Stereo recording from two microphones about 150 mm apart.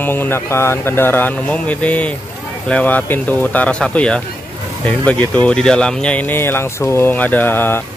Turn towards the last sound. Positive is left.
turn(degrees=15)  # may be behind; listen again after turning